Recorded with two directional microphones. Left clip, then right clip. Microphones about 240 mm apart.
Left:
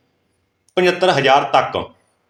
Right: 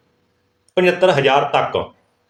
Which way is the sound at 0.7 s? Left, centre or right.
Centre.